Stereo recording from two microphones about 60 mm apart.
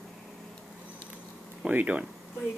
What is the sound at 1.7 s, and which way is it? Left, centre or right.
Speech, right.